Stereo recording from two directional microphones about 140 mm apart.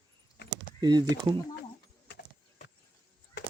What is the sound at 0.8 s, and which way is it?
Speech, 30° right (ahead or behind).